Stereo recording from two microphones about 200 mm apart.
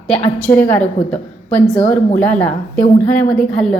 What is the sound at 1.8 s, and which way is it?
Speech, 40° left (ahead or behind).